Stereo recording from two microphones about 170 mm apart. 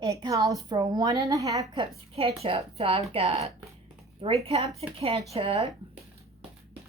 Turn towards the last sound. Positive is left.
turn(degrees=-35)  # may be behind; listen again after turning